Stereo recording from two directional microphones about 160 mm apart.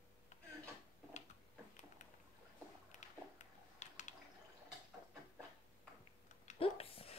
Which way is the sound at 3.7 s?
45° left (ahead or behind).